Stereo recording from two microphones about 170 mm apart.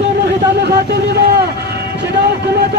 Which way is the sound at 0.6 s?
75° right (ahead or behind).